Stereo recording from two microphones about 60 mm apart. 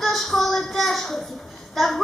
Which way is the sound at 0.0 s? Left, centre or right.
Centre.